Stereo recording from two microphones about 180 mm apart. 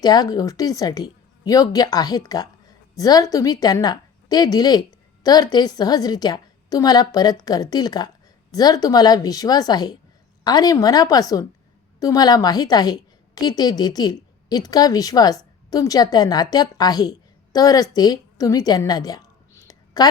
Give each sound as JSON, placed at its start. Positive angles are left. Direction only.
{"t": 0.0, "sound": "a woman's voice", "side_deg": 20}